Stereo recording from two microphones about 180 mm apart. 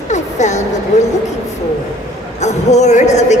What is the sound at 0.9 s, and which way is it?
Speech, 40° left (ahead or behind).